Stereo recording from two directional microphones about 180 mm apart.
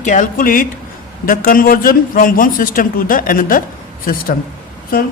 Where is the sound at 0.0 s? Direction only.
45° left (ahead or behind).